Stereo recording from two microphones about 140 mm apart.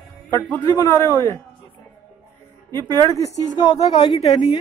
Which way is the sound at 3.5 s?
30° left (ahead or behind).